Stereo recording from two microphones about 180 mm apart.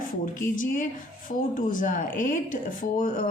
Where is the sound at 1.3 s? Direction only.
50° left (ahead or behind).